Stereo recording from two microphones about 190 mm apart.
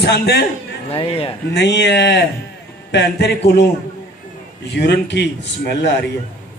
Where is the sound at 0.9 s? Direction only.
30° left (ahead or behind).